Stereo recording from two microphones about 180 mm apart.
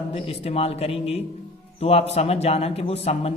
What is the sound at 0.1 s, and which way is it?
Speech, 35° left (ahead or behind).